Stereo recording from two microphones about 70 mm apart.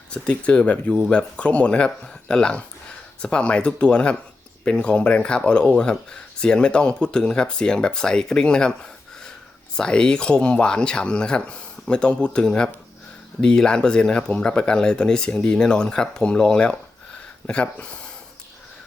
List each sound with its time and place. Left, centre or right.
0.1 s speech: centre